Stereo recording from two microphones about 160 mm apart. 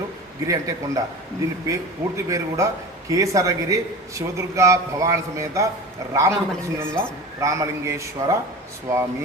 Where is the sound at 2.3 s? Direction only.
20° right (ahead or behind).